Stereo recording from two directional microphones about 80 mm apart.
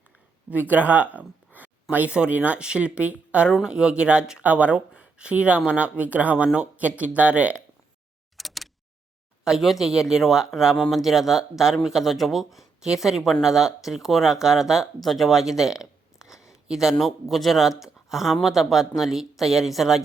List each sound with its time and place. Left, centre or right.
0.5 s speech: right
8.4 s a sound: centre
9.4 s speech: centre